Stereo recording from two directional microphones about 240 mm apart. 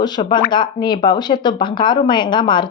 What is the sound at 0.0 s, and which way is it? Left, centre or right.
A woman's voice, centre.